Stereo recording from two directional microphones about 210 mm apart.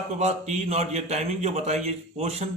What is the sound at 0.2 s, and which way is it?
A man's voice, 35° right (ahead or behind).